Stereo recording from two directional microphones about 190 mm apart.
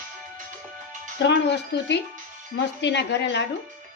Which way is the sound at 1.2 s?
65° left (ahead or behind).